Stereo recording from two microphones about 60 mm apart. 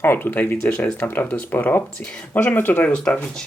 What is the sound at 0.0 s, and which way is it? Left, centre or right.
Speech, left.